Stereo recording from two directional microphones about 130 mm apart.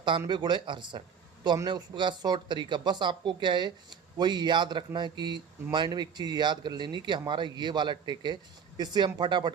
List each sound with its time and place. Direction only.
0.3 s speech: 35° right (ahead or behind)